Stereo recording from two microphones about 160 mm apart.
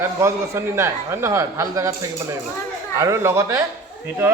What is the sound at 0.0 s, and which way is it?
A man's voice, 15° right (ahead or behind).